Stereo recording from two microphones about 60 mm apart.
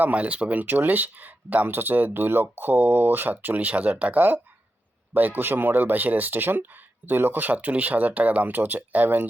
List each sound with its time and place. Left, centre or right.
0.0 s speech: right